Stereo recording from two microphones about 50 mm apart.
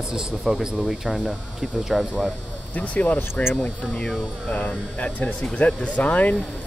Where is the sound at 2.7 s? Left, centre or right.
Left.